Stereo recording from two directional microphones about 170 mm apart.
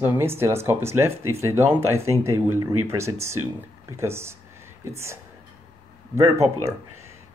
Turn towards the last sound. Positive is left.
turn(degrees=-15)  # may be behind; listen again after turning